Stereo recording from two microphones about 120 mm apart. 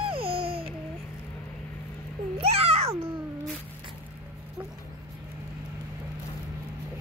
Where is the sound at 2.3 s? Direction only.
55° right (ahead or behind).